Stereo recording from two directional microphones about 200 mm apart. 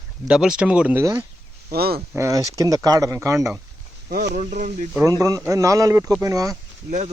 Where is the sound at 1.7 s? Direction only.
50° right (ahead or behind).